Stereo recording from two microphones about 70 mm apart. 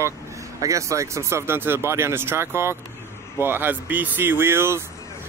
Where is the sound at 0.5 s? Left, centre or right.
Right.